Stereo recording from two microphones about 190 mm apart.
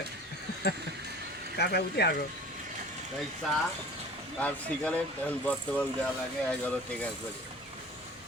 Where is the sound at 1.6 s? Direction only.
55° left (ahead or behind).